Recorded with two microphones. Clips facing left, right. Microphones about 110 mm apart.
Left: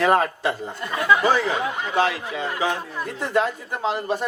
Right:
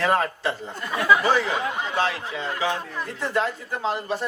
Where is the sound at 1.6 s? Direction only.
15° left (ahead or behind).